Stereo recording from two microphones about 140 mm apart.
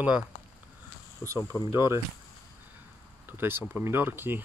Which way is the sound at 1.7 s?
20° right (ahead or behind).